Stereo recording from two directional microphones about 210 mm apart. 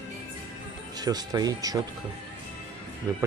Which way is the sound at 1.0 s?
20° right (ahead or behind).